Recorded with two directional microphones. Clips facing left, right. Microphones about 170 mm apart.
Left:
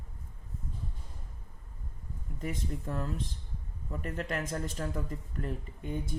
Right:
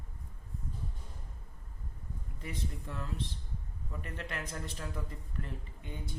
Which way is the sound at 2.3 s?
45° left (ahead or behind).